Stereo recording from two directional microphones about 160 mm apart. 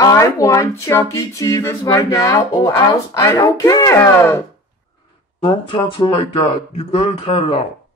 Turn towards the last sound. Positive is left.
turn(degrees=35)  # may be behind; listen again after turning